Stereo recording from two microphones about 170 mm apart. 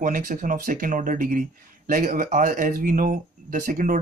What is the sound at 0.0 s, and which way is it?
Speech, 50° right (ahead or behind).